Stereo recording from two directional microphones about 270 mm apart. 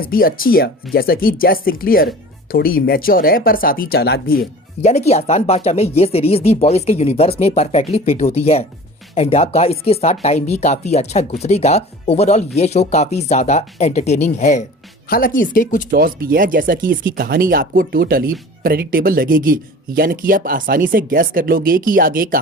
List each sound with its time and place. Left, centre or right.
0.0 s speech: left
15.9 s speech: right